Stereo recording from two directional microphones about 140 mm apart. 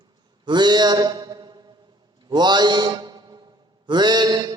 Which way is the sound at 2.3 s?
30° right (ahead or behind).